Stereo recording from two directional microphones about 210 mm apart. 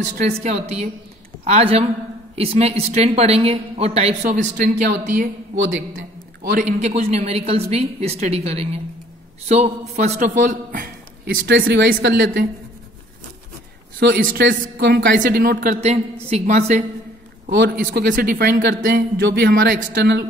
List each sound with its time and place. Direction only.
0.2 s a man's voice: 30° right (ahead or behind)
6.5 s a woman's voice: 35° right (ahead or behind)
11.4 s speech: 55° right (ahead or behind)
13.9 s speech: 50° right (ahead or behind)
15.1 s a man's voice: 40° right (ahead or behind)
17.5 s a man's voice: 55° right (ahead or behind)